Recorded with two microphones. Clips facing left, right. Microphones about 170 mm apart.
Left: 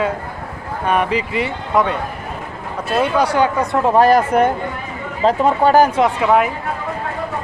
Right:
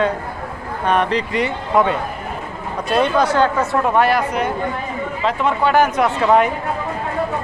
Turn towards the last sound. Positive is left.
turn(degrees=5)  # may be behind; listen again after turning